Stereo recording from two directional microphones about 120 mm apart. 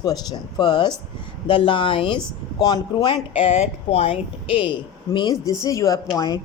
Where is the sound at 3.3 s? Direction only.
55° left (ahead or behind).